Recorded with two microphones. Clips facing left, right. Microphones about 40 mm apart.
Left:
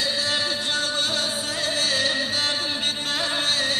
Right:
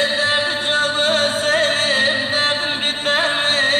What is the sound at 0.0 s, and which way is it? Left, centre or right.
Music, right.